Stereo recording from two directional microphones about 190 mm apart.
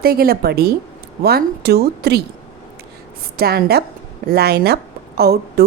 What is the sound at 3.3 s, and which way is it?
A woman's voice, 55° right (ahead or behind).